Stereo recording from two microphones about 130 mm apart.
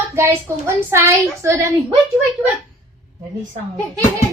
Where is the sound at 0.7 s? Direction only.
20° right (ahead or behind).